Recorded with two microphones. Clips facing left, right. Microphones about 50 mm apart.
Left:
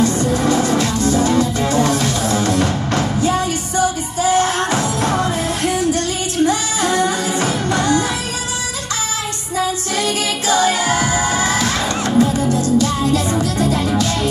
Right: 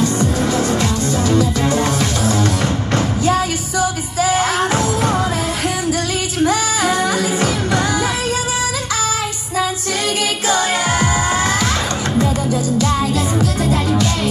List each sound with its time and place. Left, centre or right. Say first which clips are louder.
1.4 s music: even; centre
4.6 s music: right 1 dB; centre
10.6 s music: left 1 dB; centre
11.2 s music: right 1 dB; right
12.1 s music: left 4 dB; centre